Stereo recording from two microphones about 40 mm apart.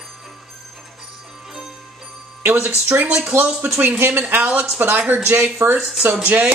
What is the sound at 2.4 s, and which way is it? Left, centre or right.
Speech, right.